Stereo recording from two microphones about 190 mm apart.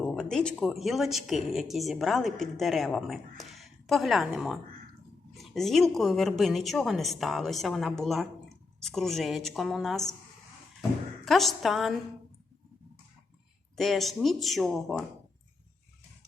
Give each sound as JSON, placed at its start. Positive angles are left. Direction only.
{"t": 0.0, "sound": "speech", "side_deg": 5}
{"t": 11.3, "sound": "speech", "side_deg": 0}
{"t": 13.7, "sound": "speech", "side_deg": 0}